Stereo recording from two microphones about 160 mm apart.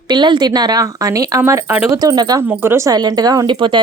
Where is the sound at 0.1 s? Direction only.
30° right (ahead or behind).